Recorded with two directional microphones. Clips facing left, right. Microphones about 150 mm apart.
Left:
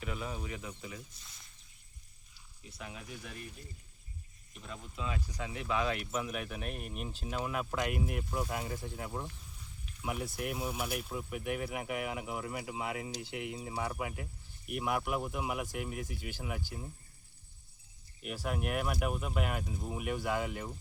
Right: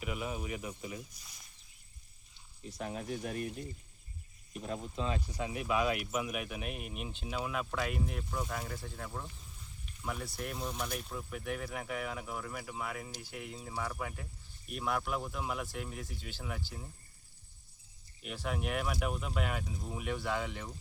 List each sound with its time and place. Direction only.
0.0 s speech: 10° right (ahead or behind)
2.7 s speech: 40° right (ahead or behind)
4.6 s speech: 35° right (ahead or behind)
5.4 s speech: 20° right (ahead or behind); by 9.2 s 15° left (ahead or behind)
9.8 s a sound: 10° left (ahead or behind)
10.3 s speech: 5° left (ahead or behind)
18.2 s speech: 5° left (ahead or behind)